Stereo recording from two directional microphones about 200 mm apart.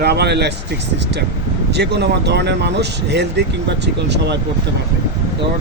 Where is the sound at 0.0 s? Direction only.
55° right (ahead or behind).